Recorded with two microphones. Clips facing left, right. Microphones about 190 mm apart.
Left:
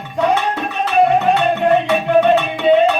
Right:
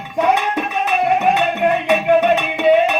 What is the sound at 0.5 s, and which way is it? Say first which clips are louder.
Music: left 3 dB; 15° right (ahead or behind).